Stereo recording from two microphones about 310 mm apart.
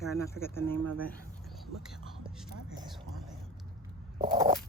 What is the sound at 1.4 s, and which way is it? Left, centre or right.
Whispering, centre.